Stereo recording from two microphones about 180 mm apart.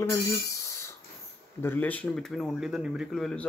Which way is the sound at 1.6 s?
10° left (ahead or behind).